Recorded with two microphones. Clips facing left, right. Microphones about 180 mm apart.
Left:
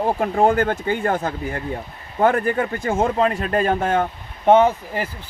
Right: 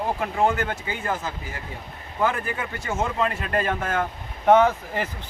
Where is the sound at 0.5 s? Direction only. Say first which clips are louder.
Left 8 dB; 55° left (ahead or behind); by 4.0 s 30° left (ahead or behind).